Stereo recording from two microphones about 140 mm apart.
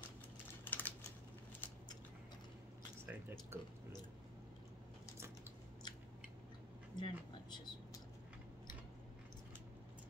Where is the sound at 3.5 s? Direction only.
15° right (ahead or behind).